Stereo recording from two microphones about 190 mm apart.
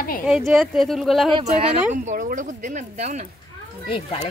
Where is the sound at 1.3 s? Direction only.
25° right (ahead or behind).